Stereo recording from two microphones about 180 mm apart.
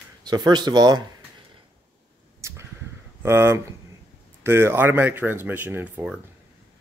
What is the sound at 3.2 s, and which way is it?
Speech, 15° right (ahead or behind).